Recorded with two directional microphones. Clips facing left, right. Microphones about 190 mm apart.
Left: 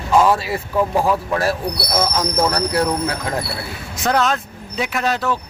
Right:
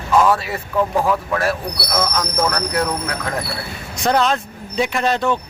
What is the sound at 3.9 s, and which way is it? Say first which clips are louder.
A man's voice: right 1 dB; centre (ahead or behind).